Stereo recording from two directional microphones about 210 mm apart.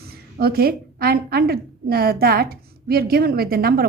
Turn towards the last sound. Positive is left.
turn(degrees=-45)  # may be behind; listen again after turning